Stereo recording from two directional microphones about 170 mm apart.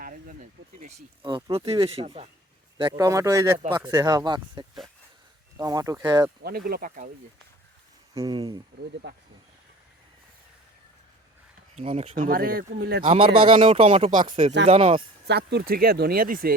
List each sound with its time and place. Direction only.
0.0 s a sound: 55° right (ahead or behind)
1.2 s speech: 25° right (ahead or behind)
6.4 s speech: 60° right (ahead or behind)
8.2 s speech: 25° right (ahead or behind)
9.0 s speech: 90° right
11.7 s speech: 40° right (ahead or behind); by 13.1 s 60° right (ahead or behind)
13.1 s speech: 30° right (ahead or behind)
15.3 s speech: 75° right (ahead or behind); by 16.6 s 55° right (ahead or behind)